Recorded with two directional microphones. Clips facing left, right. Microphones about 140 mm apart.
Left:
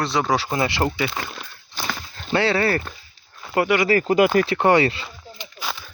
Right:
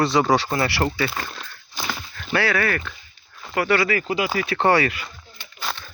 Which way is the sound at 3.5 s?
15° left (ahead or behind).